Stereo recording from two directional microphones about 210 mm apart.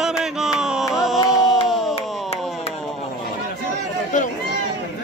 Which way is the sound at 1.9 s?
30° left (ahead or behind).